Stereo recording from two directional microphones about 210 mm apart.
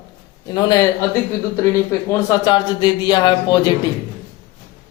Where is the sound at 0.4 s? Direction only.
20° left (ahead or behind).